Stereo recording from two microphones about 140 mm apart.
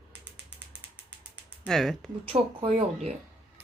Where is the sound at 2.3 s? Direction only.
40° right (ahead or behind).